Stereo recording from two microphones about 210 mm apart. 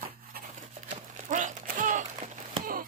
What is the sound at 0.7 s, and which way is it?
Run, 35° right (ahead or behind).